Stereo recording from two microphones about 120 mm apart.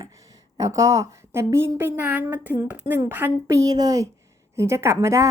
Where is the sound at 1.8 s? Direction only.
15° right (ahead or behind).